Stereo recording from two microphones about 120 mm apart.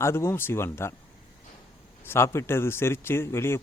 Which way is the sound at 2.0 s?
20° left (ahead or behind).